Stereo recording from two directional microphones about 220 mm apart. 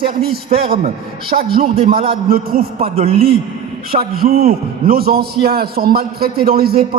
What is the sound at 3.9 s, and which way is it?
A man's voice, 45° right (ahead or behind).